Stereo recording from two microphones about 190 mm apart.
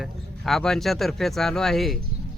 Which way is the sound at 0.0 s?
Centre (ahead or behind).